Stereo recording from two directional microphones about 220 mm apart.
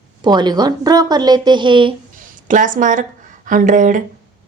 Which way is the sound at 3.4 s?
35° right (ahead or behind).